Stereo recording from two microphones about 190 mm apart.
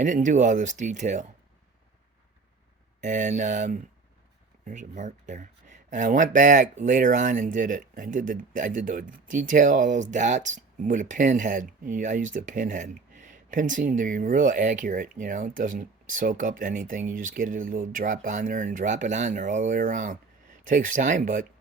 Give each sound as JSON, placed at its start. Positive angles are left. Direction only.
{"t": 0.0, "sound": "speech", "side_deg": -40}
{"t": 3.0, "sound": "speech", "side_deg": -40}